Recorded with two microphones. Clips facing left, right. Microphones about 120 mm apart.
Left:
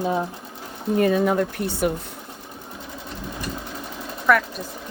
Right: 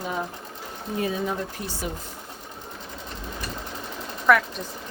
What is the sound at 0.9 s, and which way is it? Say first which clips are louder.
Speech: left 8 dB; 60° left (ahead or behind).